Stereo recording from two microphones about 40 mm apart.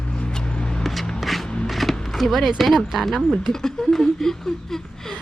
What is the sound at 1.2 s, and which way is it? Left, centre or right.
Music, centre.